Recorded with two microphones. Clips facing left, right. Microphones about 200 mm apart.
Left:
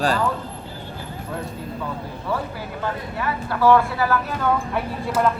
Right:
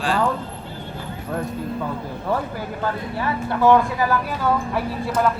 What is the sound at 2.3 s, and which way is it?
Speech, 45° right (ahead or behind).